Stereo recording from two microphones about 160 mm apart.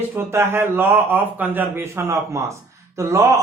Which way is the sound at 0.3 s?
15° right (ahead or behind).